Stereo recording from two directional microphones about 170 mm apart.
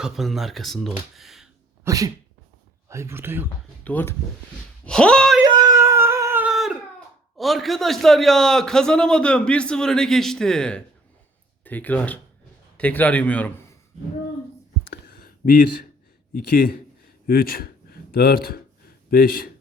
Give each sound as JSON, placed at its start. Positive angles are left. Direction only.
{"t": 0.0, "sound": "a man's voice", "side_deg": 0}
{"t": 1.1, "sound": "a sound", "side_deg": 0}
{"t": 1.8, "sound": "sneeze", "side_deg": -20}
{"t": 2.9, "sound": "speech", "side_deg": -15}
{"t": 3.8, "sound": "speech", "side_deg": 10}
{"t": 5.5, "sound": "a sound", "side_deg": -20}
{"t": 7.3, "sound": "a man's voice", "side_deg": 0}
{"t": 14.8, "sound": "a sound", "side_deg": 65}
{"t": 16.3, "sound": "a man's voice", "side_deg": 60}